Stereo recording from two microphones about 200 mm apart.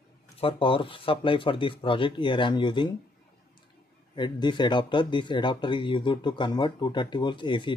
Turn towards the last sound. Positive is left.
turn(degrees=25)  # may be behind; listen again after turning